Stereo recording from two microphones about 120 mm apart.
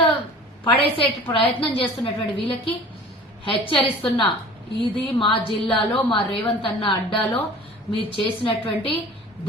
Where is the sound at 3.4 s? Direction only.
45° left (ahead or behind).